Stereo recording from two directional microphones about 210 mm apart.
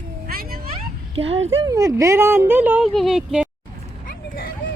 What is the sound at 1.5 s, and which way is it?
Speech, 15° right (ahead or behind).